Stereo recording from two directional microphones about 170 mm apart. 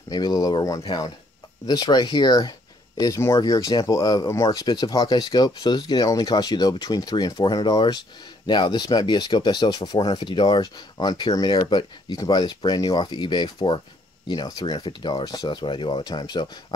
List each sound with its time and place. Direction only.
0.1 s speech: 20° left (ahead or behind)